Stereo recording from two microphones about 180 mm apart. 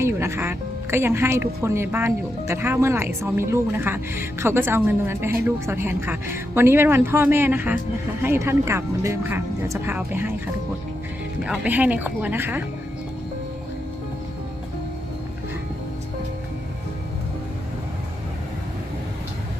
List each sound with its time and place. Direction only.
0.0 s speech: 15° right (ahead or behind)
11.4 s speech: 10° right (ahead or behind)